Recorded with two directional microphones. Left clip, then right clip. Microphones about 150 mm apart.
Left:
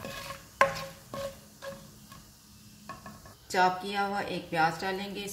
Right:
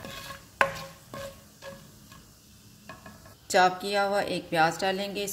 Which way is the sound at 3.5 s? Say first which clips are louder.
Right 4 dB; 65° right (ahead or behind).